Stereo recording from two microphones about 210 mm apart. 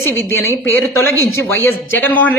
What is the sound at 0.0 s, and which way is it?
A man's voice, 10° left (ahead or behind).